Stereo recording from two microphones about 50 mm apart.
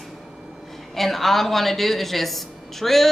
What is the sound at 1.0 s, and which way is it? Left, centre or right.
A woman's voice, centre.